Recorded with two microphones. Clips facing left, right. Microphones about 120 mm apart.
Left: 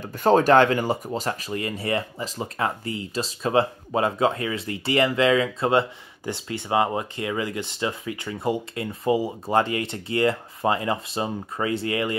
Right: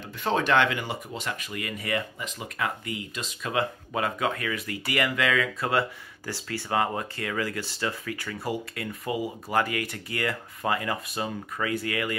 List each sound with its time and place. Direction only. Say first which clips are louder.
0.0 s speech: left 8 dB; 45° left (ahead or behind); by 12.2 s 25° left (ahead or behind)